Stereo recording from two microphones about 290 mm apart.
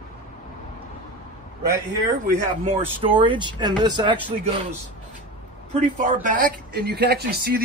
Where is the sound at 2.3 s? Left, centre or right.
Centre.